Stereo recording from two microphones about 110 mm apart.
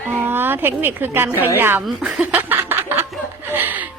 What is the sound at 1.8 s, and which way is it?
Speech, 5° right (ahead or behind).